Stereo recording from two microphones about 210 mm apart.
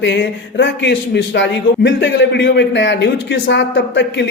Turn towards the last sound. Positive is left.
turn(degrees=60)  # may be behind; listen again after turning